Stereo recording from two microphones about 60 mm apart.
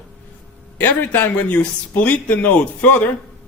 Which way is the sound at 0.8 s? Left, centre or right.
Left.